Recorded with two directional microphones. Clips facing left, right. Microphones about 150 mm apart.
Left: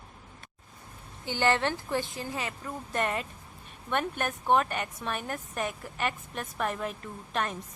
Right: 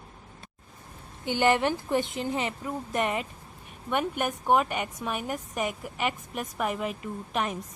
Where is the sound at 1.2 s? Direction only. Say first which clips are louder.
Right 3 dB; 15° right (ahead or behind).